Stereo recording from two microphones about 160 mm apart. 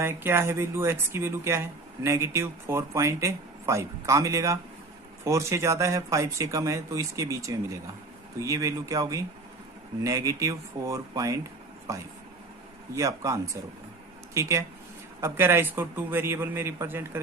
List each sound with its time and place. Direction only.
0.0 s a man's voice: 15° right (ahead or behind)